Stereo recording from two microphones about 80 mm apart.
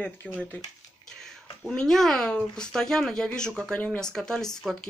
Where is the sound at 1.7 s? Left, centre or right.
Centre.